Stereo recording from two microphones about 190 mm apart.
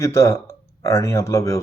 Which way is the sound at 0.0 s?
15° left (ahead or behind).